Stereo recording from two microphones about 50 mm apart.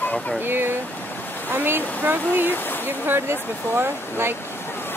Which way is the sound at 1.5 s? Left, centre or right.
Right.